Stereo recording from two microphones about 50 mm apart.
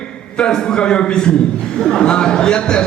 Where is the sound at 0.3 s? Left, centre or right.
Centre.